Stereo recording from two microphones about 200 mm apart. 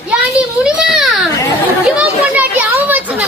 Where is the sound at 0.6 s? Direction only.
5° right (ahead or behind).